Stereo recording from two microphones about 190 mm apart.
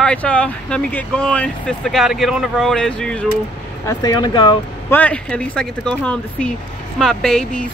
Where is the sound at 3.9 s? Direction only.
20° left (ahead or behind).